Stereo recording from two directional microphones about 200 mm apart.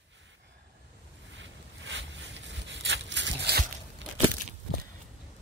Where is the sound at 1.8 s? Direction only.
65° right (ahead or behind).